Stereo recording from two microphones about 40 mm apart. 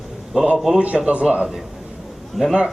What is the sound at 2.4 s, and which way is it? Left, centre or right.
Speech, centre.